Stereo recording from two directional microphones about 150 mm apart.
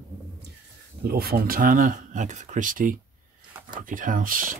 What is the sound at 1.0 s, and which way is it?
Speech, 90° right.